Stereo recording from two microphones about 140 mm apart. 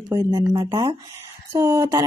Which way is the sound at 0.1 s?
25° right (ahead or behind).